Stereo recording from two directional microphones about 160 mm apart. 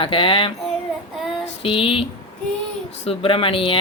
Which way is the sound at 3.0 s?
35° left (ahead or behind).